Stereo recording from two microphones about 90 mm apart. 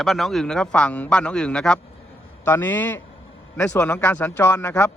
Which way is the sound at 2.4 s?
25° left (ahead or behind).